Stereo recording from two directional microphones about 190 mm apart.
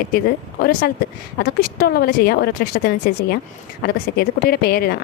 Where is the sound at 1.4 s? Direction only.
55° left (ahead or behind).